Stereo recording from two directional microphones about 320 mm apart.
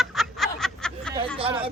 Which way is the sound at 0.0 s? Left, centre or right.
Centre.